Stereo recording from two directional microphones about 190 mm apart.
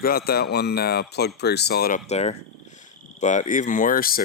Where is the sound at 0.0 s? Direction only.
50° left (ahead or behind).